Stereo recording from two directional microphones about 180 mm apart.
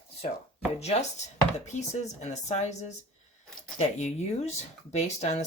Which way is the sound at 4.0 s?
40° left (ahead or behind).